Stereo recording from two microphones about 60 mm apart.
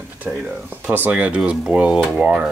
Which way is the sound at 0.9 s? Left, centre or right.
Right.